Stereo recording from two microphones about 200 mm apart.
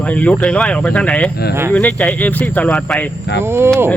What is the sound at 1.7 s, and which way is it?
Speech, 5° left (ahead or behind).